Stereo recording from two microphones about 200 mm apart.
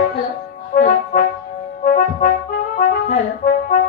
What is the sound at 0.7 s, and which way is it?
Music, 45° left (ahead or behind).